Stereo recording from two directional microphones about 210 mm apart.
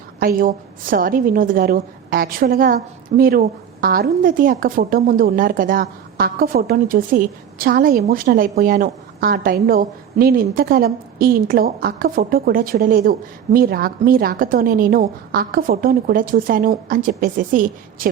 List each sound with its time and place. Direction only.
0.2 s a woman's voice: 45° right (ahead or behind)